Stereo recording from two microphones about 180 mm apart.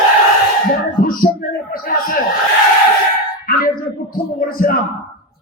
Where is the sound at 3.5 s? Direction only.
55° left (ahead or behind).